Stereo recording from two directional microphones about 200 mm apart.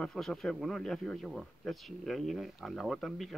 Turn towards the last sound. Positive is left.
turn(degrees=0)  # may be behind; listen again after turning